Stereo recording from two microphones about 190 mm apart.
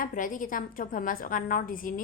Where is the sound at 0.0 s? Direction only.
45° left (ahead or behind).